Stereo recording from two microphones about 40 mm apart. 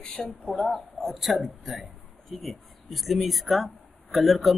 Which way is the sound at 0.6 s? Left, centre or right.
Centre.